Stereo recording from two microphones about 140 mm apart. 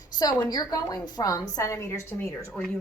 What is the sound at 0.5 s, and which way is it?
A woman's voice, 25° left (ahead or behind).